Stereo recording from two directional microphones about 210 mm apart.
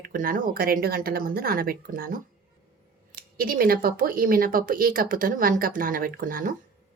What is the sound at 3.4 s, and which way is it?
Speech, 45° right (ahead or behind).